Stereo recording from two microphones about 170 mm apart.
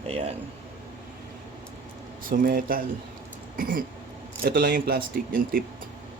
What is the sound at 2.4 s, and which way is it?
Speech, 55° right (ahead or behind).